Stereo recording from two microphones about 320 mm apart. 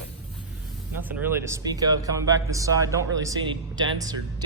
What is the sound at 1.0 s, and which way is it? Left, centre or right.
Speech, centre.